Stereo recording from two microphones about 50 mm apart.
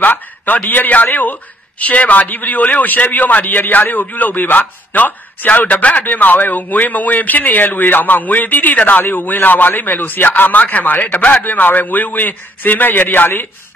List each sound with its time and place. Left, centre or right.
0.0 s a man's voice: left